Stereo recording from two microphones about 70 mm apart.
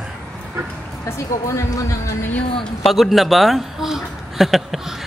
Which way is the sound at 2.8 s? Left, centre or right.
Centre.